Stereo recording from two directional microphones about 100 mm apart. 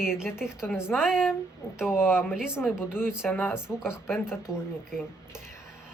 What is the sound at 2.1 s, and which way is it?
Speech, 25° left (ahead or behind).